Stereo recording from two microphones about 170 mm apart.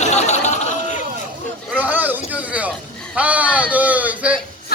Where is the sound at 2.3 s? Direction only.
10° right (ahead or behind).